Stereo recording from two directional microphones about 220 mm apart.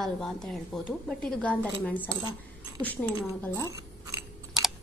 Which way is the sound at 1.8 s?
5° left (ahead or behind).